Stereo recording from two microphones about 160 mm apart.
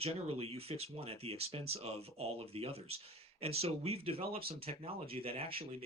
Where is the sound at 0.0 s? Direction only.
40° right (ahead or behind).